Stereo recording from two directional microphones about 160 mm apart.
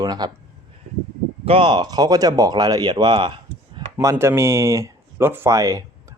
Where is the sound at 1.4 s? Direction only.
35° right (ahead or behind).